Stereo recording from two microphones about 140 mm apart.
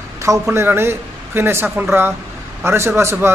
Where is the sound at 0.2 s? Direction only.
20° right (ahead or behind).